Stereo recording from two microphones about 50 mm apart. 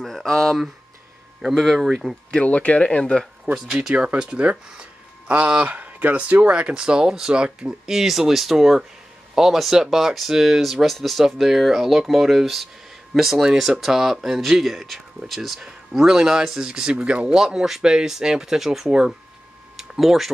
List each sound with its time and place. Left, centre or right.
0.0 s speech: centre
2.3 s speech: left
3.0 s speech: centre
3.7 s speech: centre
17.4 s speech: centre
18.9 s speech: centre
19.8 s a sound: centre